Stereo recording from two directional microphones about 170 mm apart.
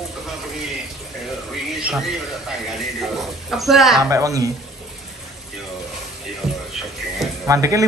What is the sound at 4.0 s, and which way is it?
Speech, 20° right (ahead or behind).